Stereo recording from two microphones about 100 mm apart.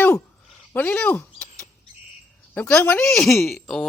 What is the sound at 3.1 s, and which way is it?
Speech, 5° left (ahead or behind).